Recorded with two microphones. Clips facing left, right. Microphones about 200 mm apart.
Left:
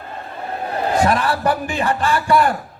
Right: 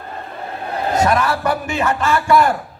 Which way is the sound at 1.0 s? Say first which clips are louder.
Right 2 dB; 35° left (ahead or behind).